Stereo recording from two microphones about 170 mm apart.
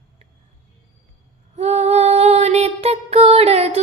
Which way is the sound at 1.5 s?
40° right (ahead or behind).